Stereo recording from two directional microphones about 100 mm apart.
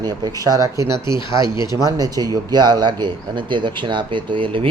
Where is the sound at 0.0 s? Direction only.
40° right (ahead or behind).